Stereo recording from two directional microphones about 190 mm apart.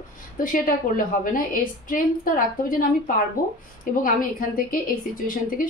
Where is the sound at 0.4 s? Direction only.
45° left (ahead or behind).